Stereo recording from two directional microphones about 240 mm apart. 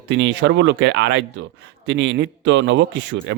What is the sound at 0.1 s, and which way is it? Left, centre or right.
Speech, right.